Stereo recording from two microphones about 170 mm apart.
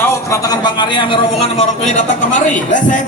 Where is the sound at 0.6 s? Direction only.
25° left (ahead or behind).